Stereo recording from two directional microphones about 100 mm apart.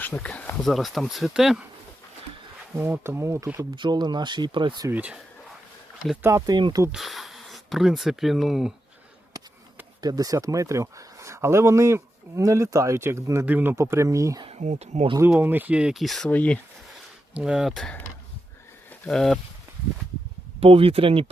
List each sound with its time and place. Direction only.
0.0 s speech: 15° left (ahead or behind)
0.6 s speech: centre (ahead or behind)
2.7 s speech: 25° right (ahead or behind)
3.8 s speech: 50° right (ahead or behind)
4.9 s speech: 15° right (ahead or behind)
6.4 s speech: 50° right (ahead or behind)
6.9 s speech: centre (ahead or behind)
10.0 s speech: 40° right (ahead or behind)
14.4 s speech: 90° right
15.3 s speech: 20° right (ahead or behind); by 16.3 s centre (ahead or behind)
16.3 s speech: 15° left (ahead or behind)
17.3 s speech: 5° right (ahead or behind)
19.0 s speech: 5° left (ahead or behind)
20.6 s speech: 70° right (ahead or behind)